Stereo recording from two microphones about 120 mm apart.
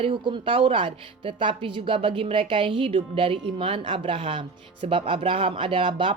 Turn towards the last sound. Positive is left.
turn(degrees=-45)  # may be behind; listen again after turning